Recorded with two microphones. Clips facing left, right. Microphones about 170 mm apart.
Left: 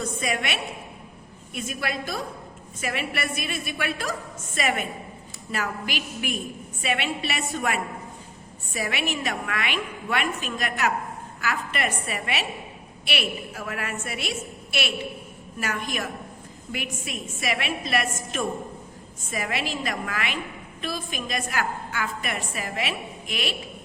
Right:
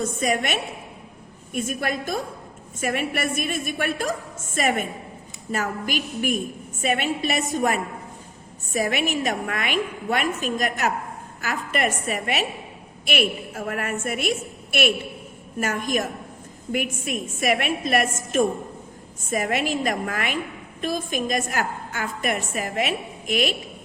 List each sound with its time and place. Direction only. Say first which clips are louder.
0.2 s a woman's voice: right 5 dB; 45° right (ahead or behind)